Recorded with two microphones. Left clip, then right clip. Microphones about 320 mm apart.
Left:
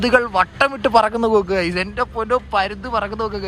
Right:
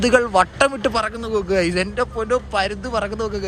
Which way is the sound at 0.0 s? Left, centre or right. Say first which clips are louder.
Even; centre.